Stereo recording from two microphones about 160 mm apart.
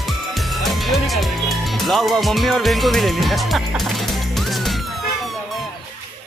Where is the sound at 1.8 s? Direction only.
Centre (ahead or behind).